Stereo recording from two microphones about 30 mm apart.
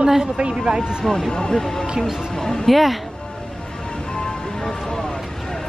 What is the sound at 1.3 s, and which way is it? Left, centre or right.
Speech, left.